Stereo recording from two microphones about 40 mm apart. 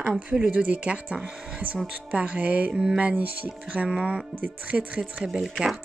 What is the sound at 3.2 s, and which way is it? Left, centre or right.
Speech, right.